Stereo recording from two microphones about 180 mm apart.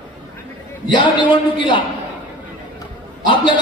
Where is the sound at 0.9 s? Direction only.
25° left (ahead or behind).